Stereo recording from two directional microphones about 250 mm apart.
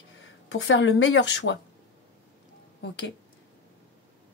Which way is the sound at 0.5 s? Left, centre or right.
Left.